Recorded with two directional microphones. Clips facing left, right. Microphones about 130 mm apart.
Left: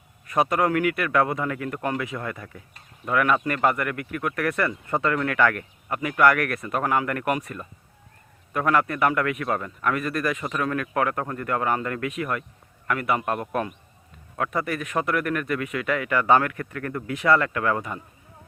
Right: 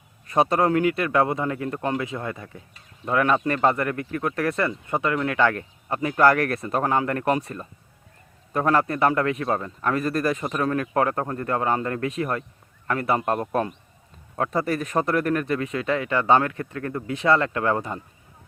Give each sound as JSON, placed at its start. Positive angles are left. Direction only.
{"t": 0.3, "sound": "a man's voice", "side_deg": -30}